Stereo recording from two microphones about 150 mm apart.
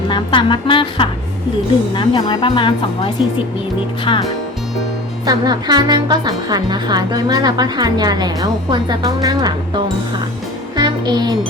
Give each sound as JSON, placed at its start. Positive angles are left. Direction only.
{"t": 0.1, "sound": "speech", "side_deg": 35}
{"t": 5.2, "sound": "speech", "side_deg": -25}
{"t": 10.8, "sound": "music", "side_deg": -30}